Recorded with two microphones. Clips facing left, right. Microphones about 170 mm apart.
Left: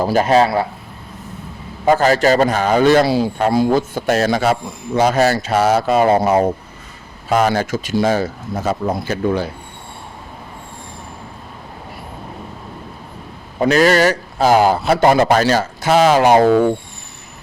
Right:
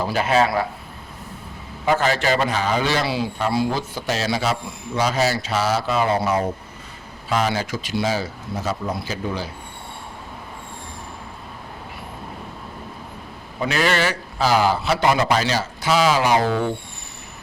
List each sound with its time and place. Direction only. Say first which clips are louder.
0.0 s a man's voice: left 6 dB; 40° left (ahead or behind)
1.8 s a man's voice: left 7 dB; 40° left (ahead or behind); by 9.5 s 55° left (ahead or behind)
13.6 s a man's voice: left 8 dB; 40° left (ahead or behind)